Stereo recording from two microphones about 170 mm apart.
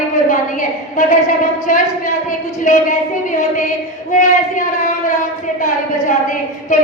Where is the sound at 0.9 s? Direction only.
50° left (ahead or behind).